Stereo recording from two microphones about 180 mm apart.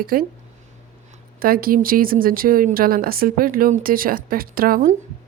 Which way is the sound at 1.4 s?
55° right (ahead or behind).